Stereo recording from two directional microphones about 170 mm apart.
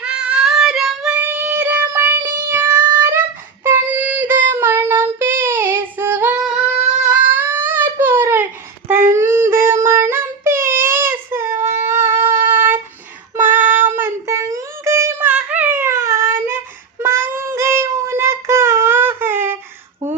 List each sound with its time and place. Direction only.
0.0 s child singing: 5° right (ahead or behind)
7.1 s baby cry: 10° right (ahead or behind)
8.9 s child singing: 15° right (ahead or behind)
20.0 s a sound: 15° right (ahead or behind)